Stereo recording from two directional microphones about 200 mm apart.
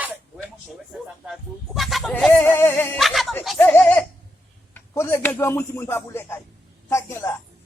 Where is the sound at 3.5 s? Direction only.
10° left (ahead or behind).